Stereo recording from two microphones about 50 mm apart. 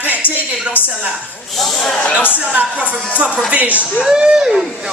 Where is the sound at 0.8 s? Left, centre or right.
Left.